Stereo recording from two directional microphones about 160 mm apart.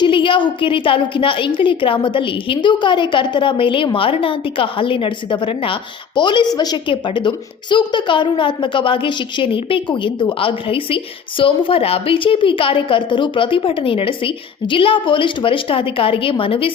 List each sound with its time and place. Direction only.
0.0 s a woman's voice: 30° left (ahead or behind)